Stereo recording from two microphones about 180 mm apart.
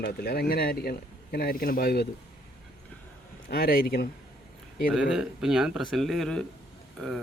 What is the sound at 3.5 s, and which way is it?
Speech, 55° left (ahead or behind).